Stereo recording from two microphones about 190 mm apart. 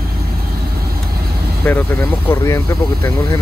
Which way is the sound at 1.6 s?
10° left (ahead or behind).